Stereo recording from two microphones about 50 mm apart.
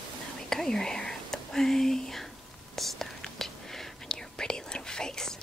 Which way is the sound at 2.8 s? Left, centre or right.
Centre.